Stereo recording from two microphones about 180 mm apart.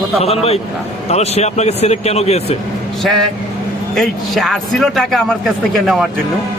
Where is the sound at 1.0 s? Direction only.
35° left (ahead or behind).